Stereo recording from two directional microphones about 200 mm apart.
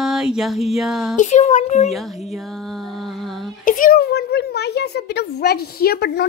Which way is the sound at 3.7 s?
45° left (ahead or behind).